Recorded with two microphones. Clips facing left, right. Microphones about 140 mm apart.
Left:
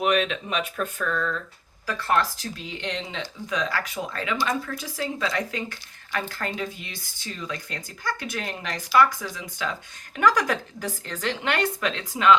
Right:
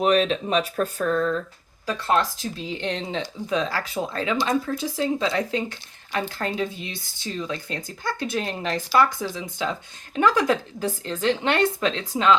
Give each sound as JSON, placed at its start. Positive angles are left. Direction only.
{"t": 0.0, "sound": "speech", "side_deg": -35}
{"t": 1.9, "sound": "speech", "side_deg": -20}